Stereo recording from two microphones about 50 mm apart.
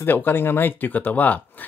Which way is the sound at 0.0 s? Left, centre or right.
Left.